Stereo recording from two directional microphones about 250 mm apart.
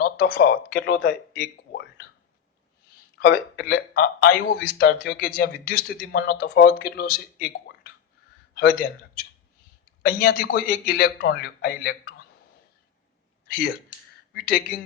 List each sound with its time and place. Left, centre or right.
0.0 s speech: left
3.2 s speech: left
10.0 s speech: left
14.3 s speech: left